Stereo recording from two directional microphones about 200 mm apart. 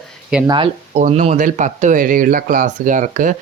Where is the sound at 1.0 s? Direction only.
35° right (ahead or behind).